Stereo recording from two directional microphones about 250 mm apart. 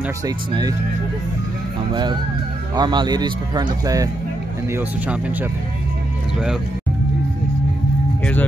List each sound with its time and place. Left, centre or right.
2.7 s speech: centre